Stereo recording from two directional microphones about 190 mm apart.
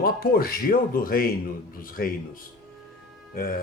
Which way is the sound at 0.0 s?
50° left (ahead or behind).